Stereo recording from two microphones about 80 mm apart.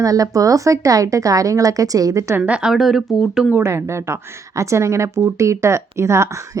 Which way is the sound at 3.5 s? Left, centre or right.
Right.